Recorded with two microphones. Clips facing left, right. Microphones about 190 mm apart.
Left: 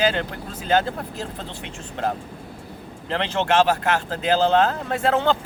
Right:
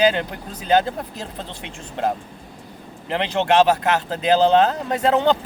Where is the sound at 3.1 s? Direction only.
15° right (ahead or behind).